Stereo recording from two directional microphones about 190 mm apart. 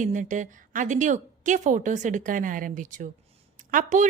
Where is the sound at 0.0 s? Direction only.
40° right (ahead or behind).